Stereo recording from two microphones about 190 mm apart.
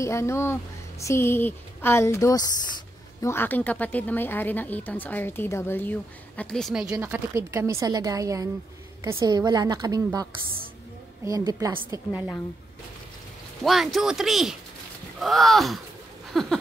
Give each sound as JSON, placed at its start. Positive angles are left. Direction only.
{"t": 0.0, "sound": "speech", "side_deg": 15}
{"t": 6.9, "sound": "a woman's voice", "side_deg": -10}
{"t": 11.2, "sound": "a woman's voice", "side_deg": -20}
{"t": 11.9, "sound": "a woman's voice", "side_deg": -10}
{"t": 13.9, "sound": "speech", "side_deg": 0}
{"t": 16.3, "sound": "a sound", "side_deg": 0}